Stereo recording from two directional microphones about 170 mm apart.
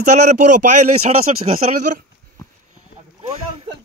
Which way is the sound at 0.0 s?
45° right (ahead or behind).